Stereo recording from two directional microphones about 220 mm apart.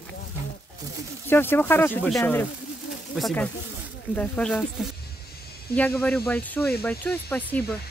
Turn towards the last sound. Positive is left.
turn(degrees=5)  # may be behind; listen again after turning